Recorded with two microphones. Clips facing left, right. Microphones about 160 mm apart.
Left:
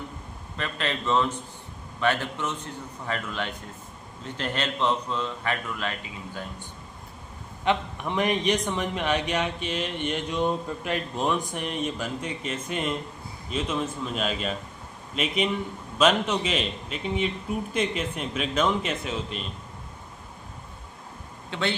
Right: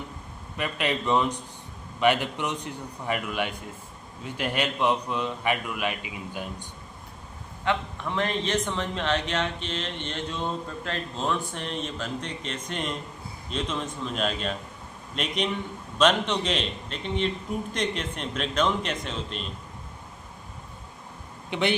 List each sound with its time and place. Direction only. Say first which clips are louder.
0.5 s a man's voice: right 2 dB; 15° right (ahead or behind)
7.6 s a man's voice: left 2 dB; 20° left (ahead or behind)
21.5 s a man's voice: right 3 dB; 15° right (ahead or behind)